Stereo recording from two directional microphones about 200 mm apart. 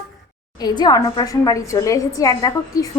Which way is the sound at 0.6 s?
20° left (ahead or behind).